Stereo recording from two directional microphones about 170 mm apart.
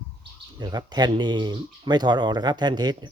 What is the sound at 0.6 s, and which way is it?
Speech, 25° right (ahead or behind).